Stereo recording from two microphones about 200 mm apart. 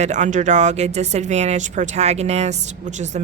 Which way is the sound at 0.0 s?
35° right (ahead or behind).